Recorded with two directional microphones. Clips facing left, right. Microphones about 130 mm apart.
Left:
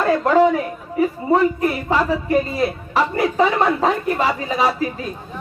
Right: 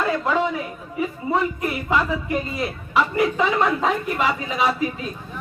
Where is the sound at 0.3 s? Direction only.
45° left (ahead or behind).